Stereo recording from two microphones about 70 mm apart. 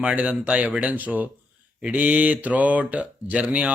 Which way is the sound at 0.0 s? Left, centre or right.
Centre.